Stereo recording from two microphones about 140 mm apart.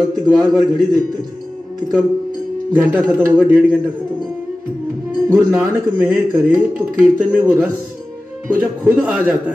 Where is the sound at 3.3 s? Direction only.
10° right (ahead or behind).